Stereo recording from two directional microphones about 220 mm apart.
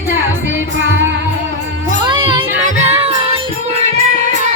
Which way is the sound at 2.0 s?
20° right (ahead or behind).